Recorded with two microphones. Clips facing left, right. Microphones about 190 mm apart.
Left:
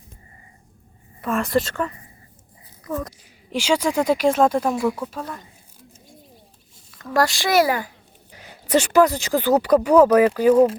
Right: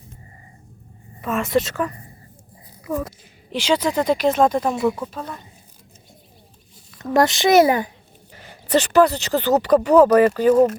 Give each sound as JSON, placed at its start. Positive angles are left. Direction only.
{"t": 1.2, "sound": "a woman's voice", "side_deg": -5}
{"t": 3.5, "sound": "speech", "side_deg": 10}
{"t": 7.0, "sound": "a child's voice", "side_deg": -20}
{"t": 8.3, "sound": "speech", "side_deg": 10}